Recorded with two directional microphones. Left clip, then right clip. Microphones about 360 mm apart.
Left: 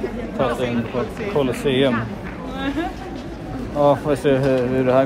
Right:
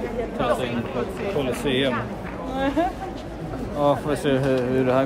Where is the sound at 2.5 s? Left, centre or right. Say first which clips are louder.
Right 3 dB; right.